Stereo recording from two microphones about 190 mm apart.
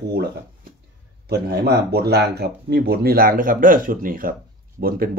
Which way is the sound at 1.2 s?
55° right (ahead or behind).